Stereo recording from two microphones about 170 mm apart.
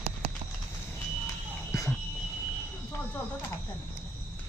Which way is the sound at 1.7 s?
20° left (ahead or behind).